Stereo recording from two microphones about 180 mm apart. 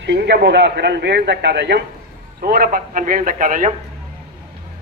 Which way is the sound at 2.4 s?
55° right (ahead or behind).